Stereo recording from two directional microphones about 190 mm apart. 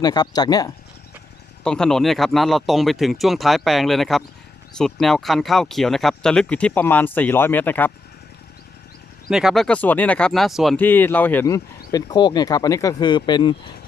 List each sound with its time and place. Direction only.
0.0 s speech: 20° left (ahead or behind)
1.6 s speech: 5° left (ahead or behind)
9.3 s speech: 5° right (ahead or behind); by 13.6 s 25° left (ahead or behind)